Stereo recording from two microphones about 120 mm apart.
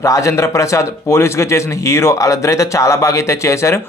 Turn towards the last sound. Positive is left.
turn(degrees=25)  # may be behind; listen again after turning